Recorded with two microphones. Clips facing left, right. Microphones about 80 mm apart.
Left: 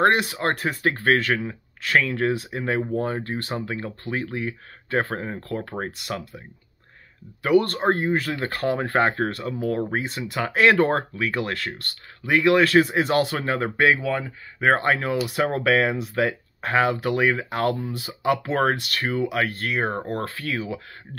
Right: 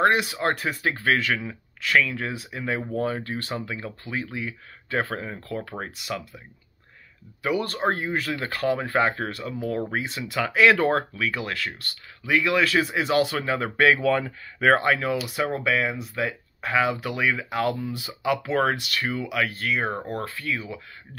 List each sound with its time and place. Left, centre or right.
0.0 s speech: left
2.0 s speech: left
2.9 s speech: left
5.7 s speech: left
7.4 s speech: left
7.9 s speech: left
14.0 s speech: centre
14.6 s speech: left
15.3 s speech: left
20.2 s speech: left